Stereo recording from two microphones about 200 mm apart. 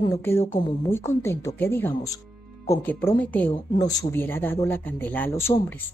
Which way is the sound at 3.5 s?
20° left (ahead or behind).